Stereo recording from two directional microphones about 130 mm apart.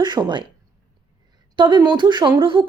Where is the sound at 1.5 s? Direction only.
35° right (ahead or behind).